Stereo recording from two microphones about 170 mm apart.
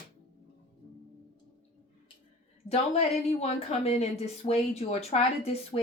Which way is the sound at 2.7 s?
40° left (ahead or behind).